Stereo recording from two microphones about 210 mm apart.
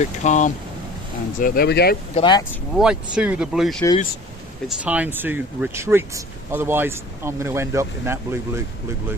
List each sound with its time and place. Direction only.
0.0 s speech: 35° left (ahead or behind); by 2.0 s 50° left (ahead or behind)
2.1 s speech: 20° left (ahead or behind)
2.7 s speech: 5° right (ahead or behind)